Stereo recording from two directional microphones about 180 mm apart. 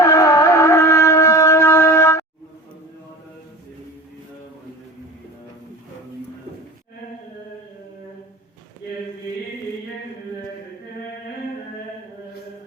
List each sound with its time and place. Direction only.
0.0 s shofar: 15° left (ahead or behind)